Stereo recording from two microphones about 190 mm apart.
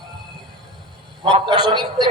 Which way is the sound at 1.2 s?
25° right (ahead or behind).